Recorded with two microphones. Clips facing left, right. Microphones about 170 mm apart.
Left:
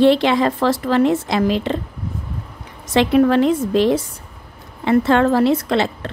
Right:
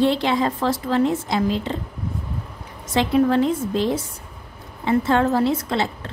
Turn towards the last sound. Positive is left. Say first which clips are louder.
# left 5 dB
turn(degrees=75)  # may be behind; listen again after turning